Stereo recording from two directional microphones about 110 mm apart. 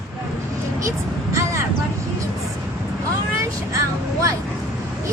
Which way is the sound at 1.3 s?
30° right (ahead or behind).